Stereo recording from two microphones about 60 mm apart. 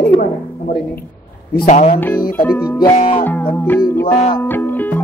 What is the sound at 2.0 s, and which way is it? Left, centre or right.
Speech, left.